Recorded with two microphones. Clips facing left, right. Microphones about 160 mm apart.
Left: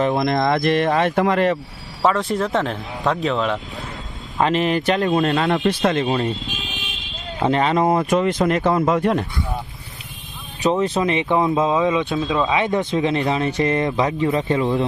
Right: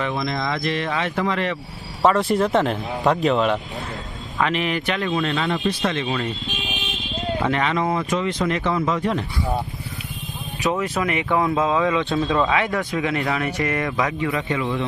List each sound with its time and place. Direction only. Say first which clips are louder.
0.1 s speech: left 6 dB; 55° left (ahead or behind)
2.0 s speech: right 1 dB; centre (ahead or behind)
4.4 s speech: left 4 dB; 35° left (ahead or behind)
7.4 s speech: left 6 dB; 35° left (ahead or behind); by 9.2 s 50° left (ahead or behind)
10.6 s speech: left 4 dB; 25° left (ahead or behind)
12.2 s speech: even; 5° left (ahead or behind)
12.5 s speech: left 2 dB; 20° left (ahead or behind); by 14.8 s 40° left (ahead or behind)